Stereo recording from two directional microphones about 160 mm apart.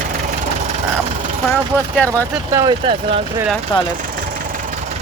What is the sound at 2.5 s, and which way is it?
Speech, 30° right (ahead or behind).